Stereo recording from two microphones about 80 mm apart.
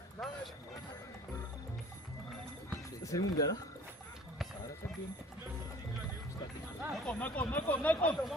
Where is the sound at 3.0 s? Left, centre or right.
Left.